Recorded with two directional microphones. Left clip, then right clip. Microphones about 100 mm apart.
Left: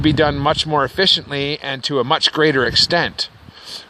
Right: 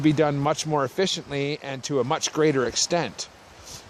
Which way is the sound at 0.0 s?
25° left (ahead or behind).